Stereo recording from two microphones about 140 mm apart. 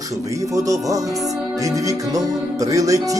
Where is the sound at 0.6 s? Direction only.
25° right (ahead or behind).